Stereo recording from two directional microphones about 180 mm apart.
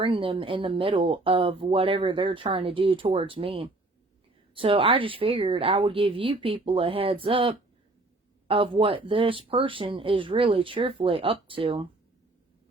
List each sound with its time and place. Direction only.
0.0 s speech: 30° right (ahead or behind)